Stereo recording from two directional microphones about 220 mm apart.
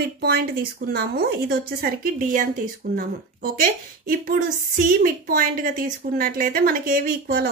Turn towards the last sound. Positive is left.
turn(degrees=-45)  # may be behind; listen again after turning